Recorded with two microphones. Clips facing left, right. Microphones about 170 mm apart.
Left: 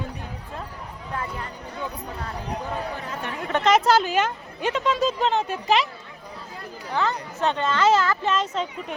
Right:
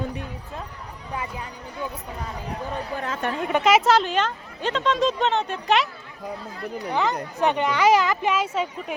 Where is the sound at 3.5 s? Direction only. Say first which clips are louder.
Even; 5° right (ahead or behind).